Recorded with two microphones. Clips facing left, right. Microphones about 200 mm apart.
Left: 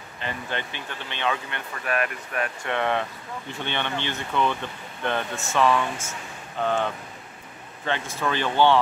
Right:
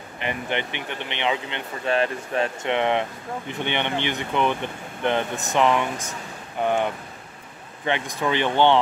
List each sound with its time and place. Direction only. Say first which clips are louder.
0.2 s speech: right 4 dB; 20° right (ahead or behind)